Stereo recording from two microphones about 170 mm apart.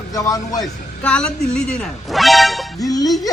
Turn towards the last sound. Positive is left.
turn(degrees=20)  # may be behind; listen again after turning